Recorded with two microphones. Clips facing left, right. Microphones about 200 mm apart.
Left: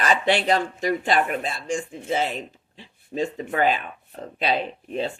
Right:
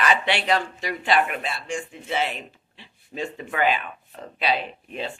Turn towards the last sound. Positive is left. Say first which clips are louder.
# left 5 dB
turn(degrees=40)  # may be behind; listen again after turning